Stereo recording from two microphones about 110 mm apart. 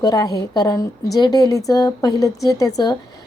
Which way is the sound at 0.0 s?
35° left (ahead or behind).